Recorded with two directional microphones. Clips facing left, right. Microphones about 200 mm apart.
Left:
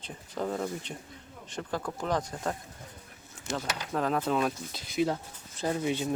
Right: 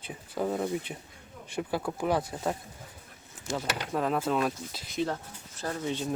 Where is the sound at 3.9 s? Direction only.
Centre (ahead or behind).